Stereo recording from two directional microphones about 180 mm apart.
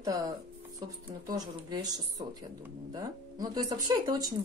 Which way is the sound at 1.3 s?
20° right (ahead or behind).